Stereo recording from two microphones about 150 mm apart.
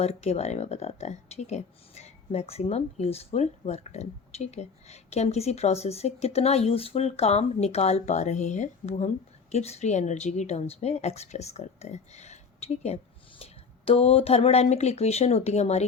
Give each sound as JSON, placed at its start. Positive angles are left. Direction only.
{"t": 0.0, "sound": "speech", "side_deg": 45}